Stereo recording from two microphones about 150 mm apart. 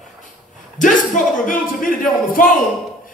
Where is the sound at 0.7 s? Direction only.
60° left (ahead or behind).